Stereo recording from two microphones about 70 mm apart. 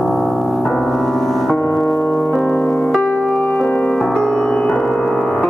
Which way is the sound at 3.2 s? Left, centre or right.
Centre.